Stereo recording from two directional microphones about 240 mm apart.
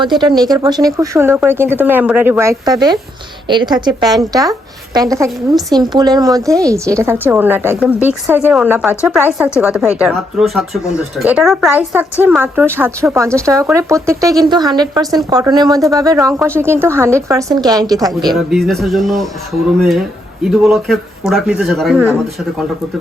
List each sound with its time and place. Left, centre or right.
0.0 s a woman's voice: centre
18.3 s speech: centre